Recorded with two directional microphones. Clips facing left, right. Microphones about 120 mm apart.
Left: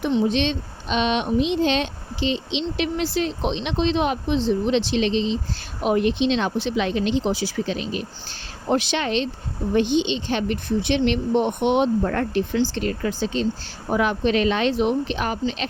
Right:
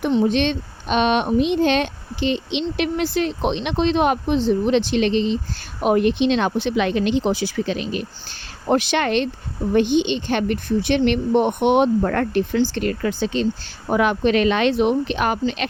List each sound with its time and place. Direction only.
0.0 s speech: 45° right (ahead or behind); by 15.6 s 65° right (ahead or behind)